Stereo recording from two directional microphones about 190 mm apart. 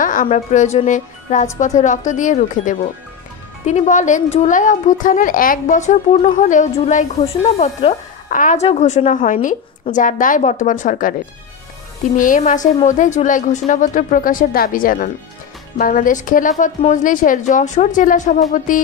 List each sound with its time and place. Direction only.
0.0 s a woman's voice: 45° left (ahead or behind)
12.2 s a woman's voice: 45° left (ahead or behind)